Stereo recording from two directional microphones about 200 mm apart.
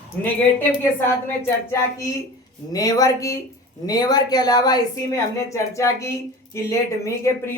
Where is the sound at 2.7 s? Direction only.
20° left (ahead or behind).